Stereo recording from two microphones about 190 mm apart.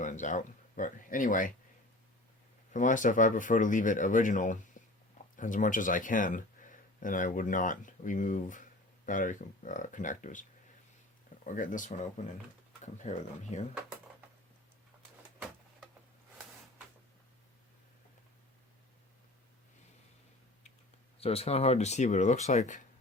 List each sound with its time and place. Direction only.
0.0 s speech: 40° left (ahead or behind)
2.7 s speech: 40° left (ahead or behind)
4.8 s a sound: 40° left (ahead or behind)
5.1 s speech: 45° left (ahead or behind)
11.4 s speech: 45° left (ahead or behind)
21.2 s speech: 30° left (ahead or behind)